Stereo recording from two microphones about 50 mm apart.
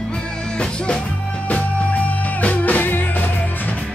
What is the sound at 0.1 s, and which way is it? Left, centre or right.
Music, centre.